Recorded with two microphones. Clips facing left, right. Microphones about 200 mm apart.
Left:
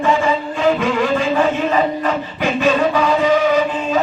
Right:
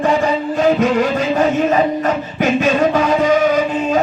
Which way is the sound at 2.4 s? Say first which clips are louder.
Right 2 dB; 45° right (ahead or behind).